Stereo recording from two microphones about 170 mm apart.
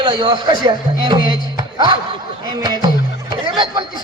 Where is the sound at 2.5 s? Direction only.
25° right (ahead or behind).